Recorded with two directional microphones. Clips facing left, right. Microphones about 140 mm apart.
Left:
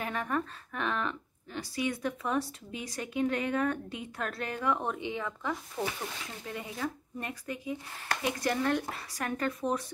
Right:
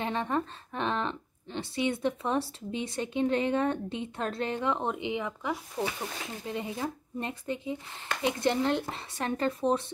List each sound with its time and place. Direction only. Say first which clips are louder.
0.0 s speech: right 3 dB; 25° right (ahead or behind)